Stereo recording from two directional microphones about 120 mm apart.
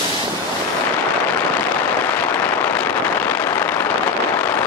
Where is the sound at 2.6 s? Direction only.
15° left (ahead or behind).